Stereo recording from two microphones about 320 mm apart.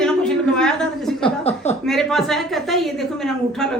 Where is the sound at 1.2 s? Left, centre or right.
Centre.